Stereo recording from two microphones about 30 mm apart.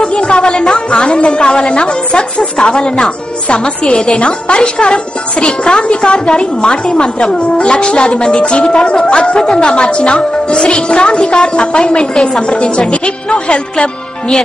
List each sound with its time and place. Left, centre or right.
0.0 s a woman's voice: left